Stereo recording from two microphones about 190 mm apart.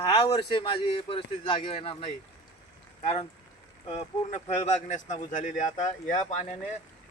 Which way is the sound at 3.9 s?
35° left (ahead or behind).